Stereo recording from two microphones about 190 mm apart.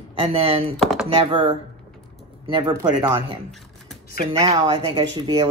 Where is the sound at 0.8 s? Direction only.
Centre (ahead or behind).